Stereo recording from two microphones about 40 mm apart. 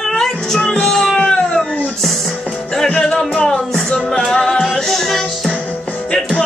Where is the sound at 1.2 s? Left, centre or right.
Centre.